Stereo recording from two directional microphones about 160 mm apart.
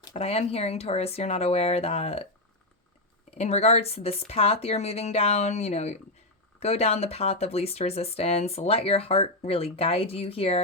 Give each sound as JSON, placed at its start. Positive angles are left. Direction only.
{"t": 0.1, "sound": "speech", "side_deg": 40}
{"t": 3.3, "sound": "speech", "side_deg": 40}